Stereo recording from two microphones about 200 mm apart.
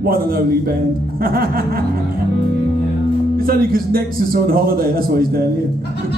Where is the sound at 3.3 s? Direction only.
50° right (ahead or behind).